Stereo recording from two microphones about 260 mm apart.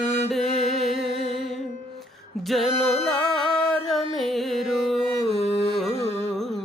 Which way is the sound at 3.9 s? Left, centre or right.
Centre.